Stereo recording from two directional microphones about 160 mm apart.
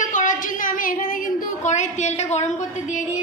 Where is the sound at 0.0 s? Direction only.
55° left (ahead or behind).